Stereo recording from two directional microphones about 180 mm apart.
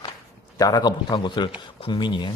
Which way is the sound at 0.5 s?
20° left (ahead or behind).